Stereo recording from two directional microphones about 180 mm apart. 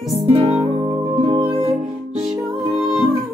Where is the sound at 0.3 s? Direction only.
30° right (ahead or behind).